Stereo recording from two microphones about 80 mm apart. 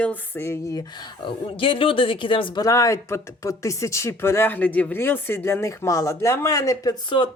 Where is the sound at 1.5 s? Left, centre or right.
Left.